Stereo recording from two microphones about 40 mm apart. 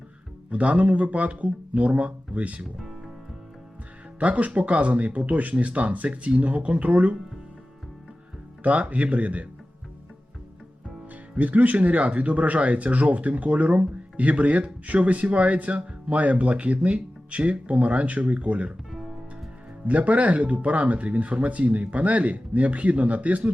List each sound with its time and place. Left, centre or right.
0.5 s speech: right
4.2 s speech: right
8.6 s speech: right
11.1 s speech: right
19.9 s speech: right